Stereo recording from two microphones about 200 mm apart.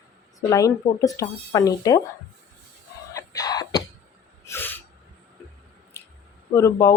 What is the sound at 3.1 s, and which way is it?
Chicken, 15° left (ahead or behind).